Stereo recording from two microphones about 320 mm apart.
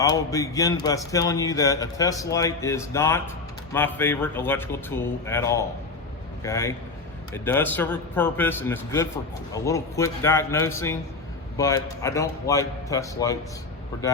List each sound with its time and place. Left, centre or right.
0.0 s speech: centre